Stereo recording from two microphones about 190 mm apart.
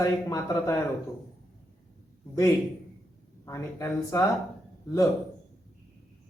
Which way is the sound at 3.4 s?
15° left (ahead or behind).